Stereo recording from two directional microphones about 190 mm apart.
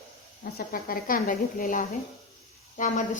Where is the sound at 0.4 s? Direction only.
50° left (ahead or behind).